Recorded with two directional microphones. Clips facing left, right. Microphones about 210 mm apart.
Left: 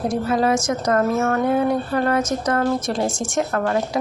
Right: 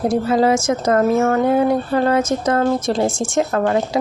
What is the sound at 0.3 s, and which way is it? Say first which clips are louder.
Speech: right 2 dB; 25° right (ahead or behind).